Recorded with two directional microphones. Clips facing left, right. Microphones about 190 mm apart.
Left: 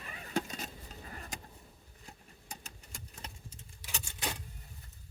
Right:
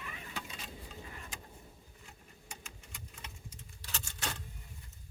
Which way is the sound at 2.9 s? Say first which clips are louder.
Left 4 dB; 40° left (ahead or behind).